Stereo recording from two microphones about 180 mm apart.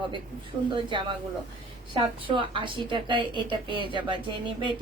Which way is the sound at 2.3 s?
25° right (ahead or behind).